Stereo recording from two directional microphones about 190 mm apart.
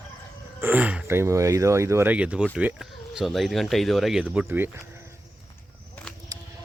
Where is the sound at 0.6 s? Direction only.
10° right (ahead or behind).